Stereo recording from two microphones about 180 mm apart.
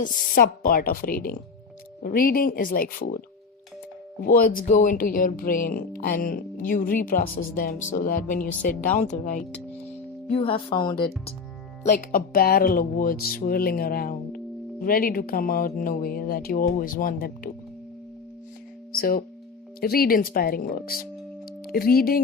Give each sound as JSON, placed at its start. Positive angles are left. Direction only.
{"t": 0.0, "sound": "speech", "side_deg": 50}
{"t": 10.3, "sound": "speech", "side_deg": 30}
{"t": 11.9, "sound": "speech", "side_deg": 55}
{"t": 18.9, "sound": "speech", "side_deg": 55}